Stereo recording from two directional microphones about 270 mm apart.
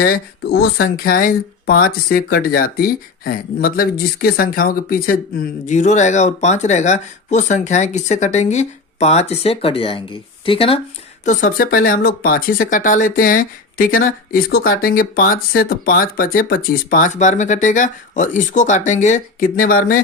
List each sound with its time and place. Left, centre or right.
0.0 s speech: left; by 10.8 s centre
11.3 s speech: left